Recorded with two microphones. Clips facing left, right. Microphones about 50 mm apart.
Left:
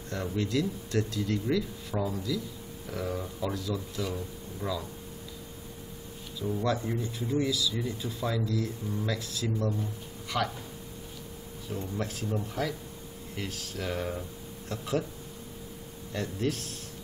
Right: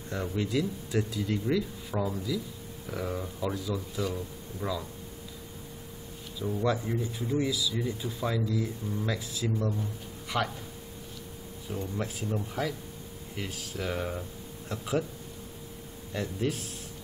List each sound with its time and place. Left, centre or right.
0.1 s speech: centre
6.4 s speech: centre
10.3 s speech: centre
11.7 s speech: centre
16.1 s speech: centre